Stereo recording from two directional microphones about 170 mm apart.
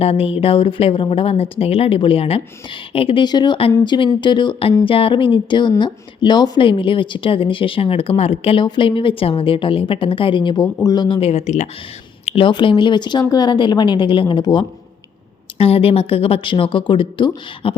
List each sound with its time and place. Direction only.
0.0 s a woman's voice: 35° left (ahead or behind)